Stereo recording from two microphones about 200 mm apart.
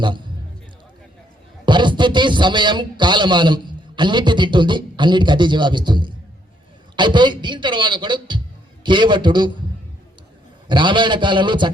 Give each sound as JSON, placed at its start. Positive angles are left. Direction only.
{"t": 1.6, "sound": "speech", "side_deg": -25}
{"t": 10.7, "sound": "speech", "side_deg": -25}